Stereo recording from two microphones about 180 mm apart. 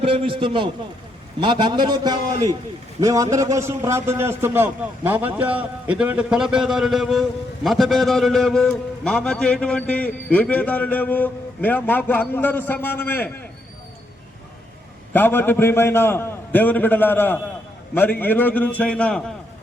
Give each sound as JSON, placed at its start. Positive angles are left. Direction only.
{"t": 0.0, "sound": "a man's voice", "side_deg": -30}
{"t": 15.1, "sound": "a man's voice", "side_deg": 10}